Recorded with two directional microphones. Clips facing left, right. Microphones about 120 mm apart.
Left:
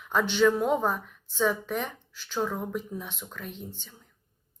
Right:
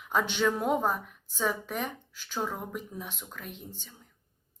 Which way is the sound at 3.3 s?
10° right (ahead or behind).